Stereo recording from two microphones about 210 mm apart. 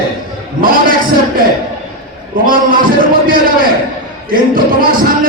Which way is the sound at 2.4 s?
40° right (ahead or behind).